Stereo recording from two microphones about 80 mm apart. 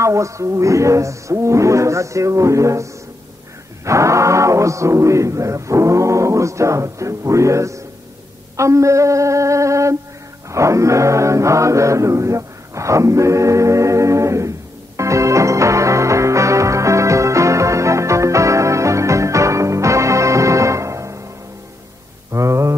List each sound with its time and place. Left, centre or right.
0.0 s speech: right
10.5 s chant: right
15.0 s music: right
22.3 s mantra: right